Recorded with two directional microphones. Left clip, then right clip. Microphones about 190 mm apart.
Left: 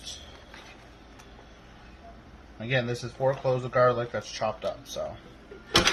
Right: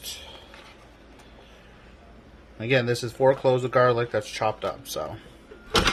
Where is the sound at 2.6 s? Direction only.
65° right (ahead or behind).